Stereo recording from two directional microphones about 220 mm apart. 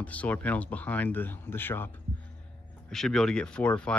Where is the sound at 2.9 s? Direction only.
Centre (ahead or behind).